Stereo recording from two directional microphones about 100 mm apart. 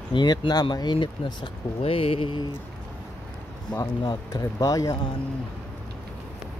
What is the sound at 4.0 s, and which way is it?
Speech, 45° left (ahead or behind).